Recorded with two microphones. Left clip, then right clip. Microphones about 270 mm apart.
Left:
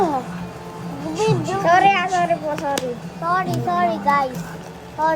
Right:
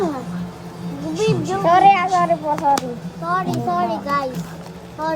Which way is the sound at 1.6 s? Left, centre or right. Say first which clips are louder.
Right 2 dB; centre.